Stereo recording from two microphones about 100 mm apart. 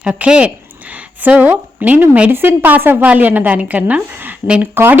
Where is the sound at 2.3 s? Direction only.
20° right (ahead or behind).